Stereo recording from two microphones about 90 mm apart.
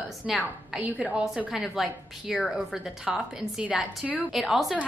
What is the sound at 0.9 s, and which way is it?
Speech, 15° right (ahead or behind).